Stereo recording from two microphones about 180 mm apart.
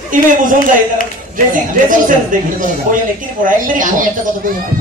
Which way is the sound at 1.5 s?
45° right (ahead or behind).